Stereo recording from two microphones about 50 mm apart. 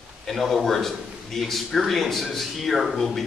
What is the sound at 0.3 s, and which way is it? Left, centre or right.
A man's voice, centre.